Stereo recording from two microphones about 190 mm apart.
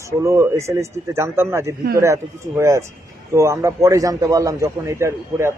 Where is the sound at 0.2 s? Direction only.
15° right (ahead or behind).